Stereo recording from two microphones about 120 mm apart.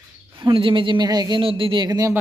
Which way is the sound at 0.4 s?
45° right (ahead or behind).